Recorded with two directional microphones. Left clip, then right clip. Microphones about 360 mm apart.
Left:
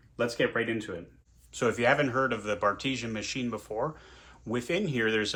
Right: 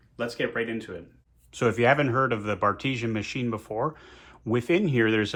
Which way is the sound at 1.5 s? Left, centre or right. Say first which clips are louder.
Right 3 dB; right.